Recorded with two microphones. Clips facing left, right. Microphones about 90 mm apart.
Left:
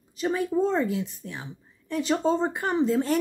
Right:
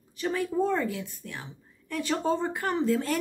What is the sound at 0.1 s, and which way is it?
Speech, 20° left (ahead or behind).